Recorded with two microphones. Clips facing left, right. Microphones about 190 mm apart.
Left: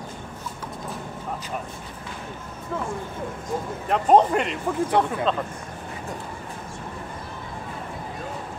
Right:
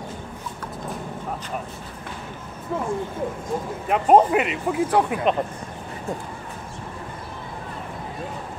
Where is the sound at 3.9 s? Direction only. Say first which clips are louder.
Right 2 dB; 5° right (ahead or behind).